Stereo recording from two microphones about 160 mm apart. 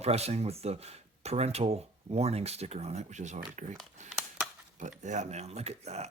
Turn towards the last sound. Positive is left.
turn(degrees=-40)  # may be behind; listen again after turning